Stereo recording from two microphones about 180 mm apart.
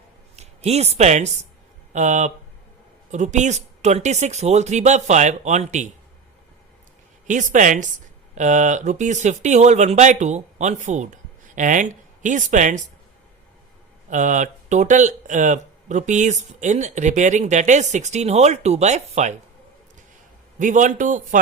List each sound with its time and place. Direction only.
0.3 s speech: 35° right (ahead or behind)
7.3 s a man's voice: 45° right (ahead or behind)
14.1 s speech: 45° right (ahead or behind)
20.6 s a man's voice: 45° right (ahead or behind)